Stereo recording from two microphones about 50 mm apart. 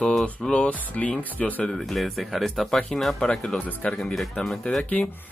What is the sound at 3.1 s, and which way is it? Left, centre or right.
Speech, centre.